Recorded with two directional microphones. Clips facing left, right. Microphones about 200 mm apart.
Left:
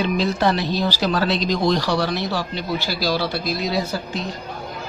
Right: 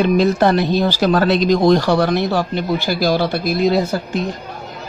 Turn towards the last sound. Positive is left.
turn(degrees=-50)  # may be behind; listen again after turning